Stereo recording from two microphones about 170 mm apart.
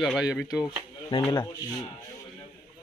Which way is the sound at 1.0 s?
30° left (ahead or behind).